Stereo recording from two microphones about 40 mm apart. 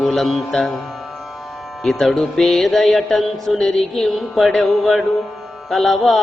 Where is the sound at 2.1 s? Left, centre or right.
Centre.